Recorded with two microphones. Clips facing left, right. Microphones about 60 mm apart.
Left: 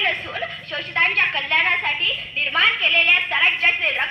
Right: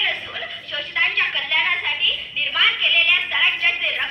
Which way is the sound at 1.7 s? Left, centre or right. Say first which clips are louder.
Left 1 dB; left.